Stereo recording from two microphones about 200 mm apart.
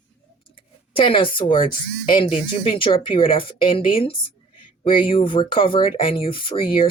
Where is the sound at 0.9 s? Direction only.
25° left (ahead or behind).